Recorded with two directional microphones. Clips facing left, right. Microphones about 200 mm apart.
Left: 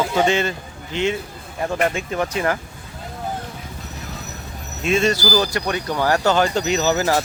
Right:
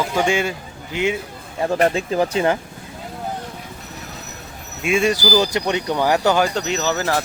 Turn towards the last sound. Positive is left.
turn(degrees=5)  # may be behind; listen again after turning